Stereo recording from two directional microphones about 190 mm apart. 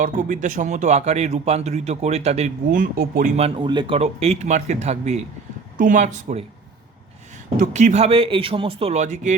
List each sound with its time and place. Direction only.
0.0 s a man's voice: 45° right (ahead or behind)
3.3 s a man's voice: 30° right (ahead or behind)
7.5 s a man's voice: 40° right (ahead or behind)